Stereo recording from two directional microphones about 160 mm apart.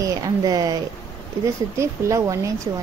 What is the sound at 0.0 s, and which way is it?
Speech, 20° right (ahead or behind).